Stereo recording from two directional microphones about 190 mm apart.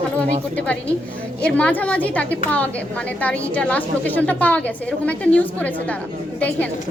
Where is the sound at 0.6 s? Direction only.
5° left (ahead or behind).